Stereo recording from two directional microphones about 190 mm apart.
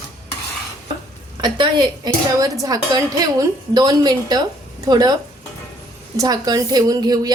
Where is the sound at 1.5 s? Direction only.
25° right (ahead or behind).